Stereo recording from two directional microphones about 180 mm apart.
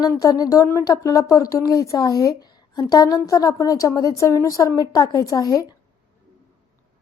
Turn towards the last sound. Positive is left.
turn(degrees=20)  # may be behind; listen again after turning